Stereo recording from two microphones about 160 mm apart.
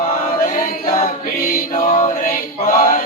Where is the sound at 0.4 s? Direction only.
55° left (ahead or behind).